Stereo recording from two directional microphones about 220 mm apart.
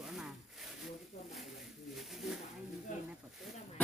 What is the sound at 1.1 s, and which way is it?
Speech, 30° left (ahead or behind).